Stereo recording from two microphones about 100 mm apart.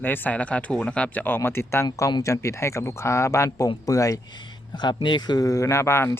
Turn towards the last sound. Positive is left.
turn(degrees=25)  # may be behind; listen again after turning